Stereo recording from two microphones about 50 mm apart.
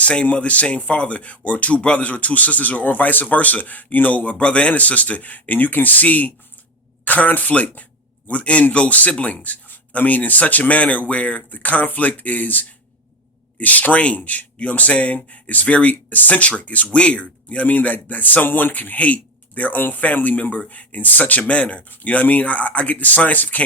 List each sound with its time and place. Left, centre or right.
0.0 s speech: left